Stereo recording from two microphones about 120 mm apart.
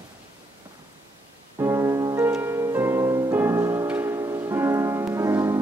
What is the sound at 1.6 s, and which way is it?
Music, 25° right (ahead or behind).